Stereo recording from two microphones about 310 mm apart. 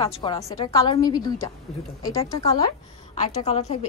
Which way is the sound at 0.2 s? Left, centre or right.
Centre.